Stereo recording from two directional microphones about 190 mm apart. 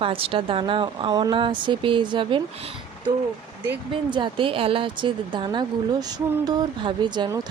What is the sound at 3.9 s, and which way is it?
Speech, 25° right (ahead or behind).